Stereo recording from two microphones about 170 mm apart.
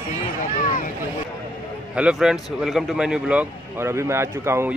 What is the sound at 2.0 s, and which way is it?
Speech, 5° right (ahead or behind).